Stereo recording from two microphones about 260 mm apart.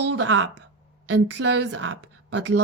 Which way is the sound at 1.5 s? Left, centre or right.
Right.